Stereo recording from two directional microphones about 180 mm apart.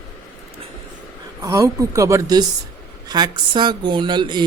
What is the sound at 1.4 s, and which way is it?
Speech, 20° right (ahead or behind).